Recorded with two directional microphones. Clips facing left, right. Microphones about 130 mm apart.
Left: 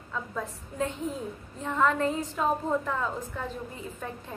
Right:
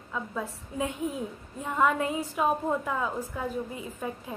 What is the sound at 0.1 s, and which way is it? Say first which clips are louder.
A woman's voice: right 1 dB; 10° right (ahead or behind).